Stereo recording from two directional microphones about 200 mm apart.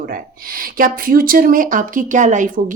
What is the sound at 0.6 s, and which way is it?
Speech, 45° right (ahead or behind).